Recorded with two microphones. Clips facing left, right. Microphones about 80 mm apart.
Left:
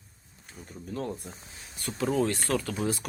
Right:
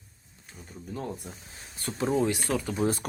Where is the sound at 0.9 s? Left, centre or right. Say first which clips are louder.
Left 2 dB; centre.